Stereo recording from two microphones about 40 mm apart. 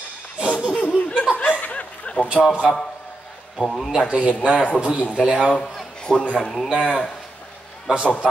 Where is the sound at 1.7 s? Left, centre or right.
Left.